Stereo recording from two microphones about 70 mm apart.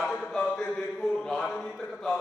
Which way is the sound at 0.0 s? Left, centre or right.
Centre.